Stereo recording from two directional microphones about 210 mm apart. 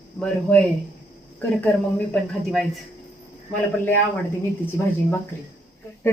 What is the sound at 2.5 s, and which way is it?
Speech, centre (ahead or behind).